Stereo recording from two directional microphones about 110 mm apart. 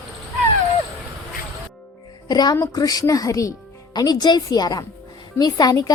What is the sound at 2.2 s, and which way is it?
A woman's voice, 35° left (ahead or behind).